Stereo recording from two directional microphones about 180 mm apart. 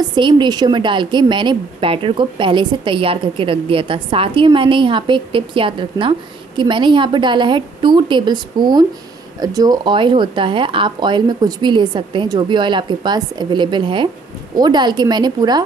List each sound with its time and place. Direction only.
0.0 s a woman's voice: 25° right (ahead or behind)